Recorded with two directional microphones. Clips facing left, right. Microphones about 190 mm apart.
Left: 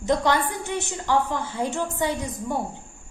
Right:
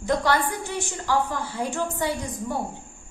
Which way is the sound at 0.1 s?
20° left (ahead or behind).